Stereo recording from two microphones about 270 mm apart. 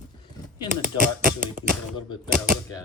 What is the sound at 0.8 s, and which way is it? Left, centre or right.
Speech, right.